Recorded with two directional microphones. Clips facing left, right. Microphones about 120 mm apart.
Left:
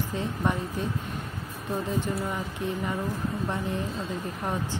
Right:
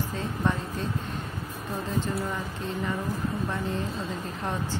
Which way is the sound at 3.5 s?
15° left (ahead or behind).